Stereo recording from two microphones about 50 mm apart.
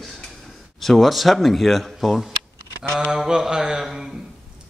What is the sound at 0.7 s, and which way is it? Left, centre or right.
A man's voice, centre.